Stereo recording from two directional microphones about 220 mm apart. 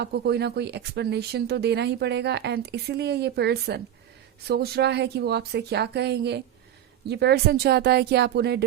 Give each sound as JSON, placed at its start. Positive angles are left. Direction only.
{"t": 0.0, "sound": "speech", "side_deg": -50}